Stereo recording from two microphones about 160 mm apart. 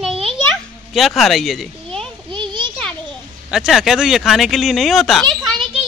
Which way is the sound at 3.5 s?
Centre (ahead or behind).